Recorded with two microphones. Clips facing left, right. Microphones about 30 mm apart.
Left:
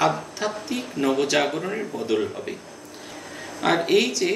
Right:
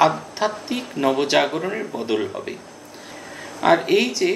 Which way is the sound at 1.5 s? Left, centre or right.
Centre.